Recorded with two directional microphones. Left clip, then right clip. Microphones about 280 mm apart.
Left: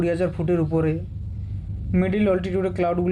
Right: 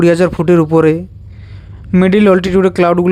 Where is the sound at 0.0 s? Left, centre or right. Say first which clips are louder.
Right 13 dB; right.